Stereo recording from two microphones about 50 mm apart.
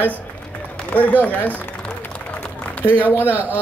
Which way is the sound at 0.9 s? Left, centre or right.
Left.